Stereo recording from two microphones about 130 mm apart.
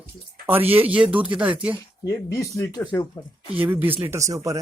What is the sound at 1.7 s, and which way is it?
Speech, 25° left (ahead or behind).